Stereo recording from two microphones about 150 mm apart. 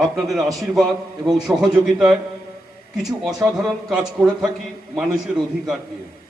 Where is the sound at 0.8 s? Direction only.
25° right (ahead or behind).